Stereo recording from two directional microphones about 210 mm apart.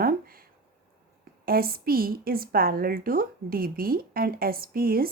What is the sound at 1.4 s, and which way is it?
A woman's voice, 45° right (ahead or behind).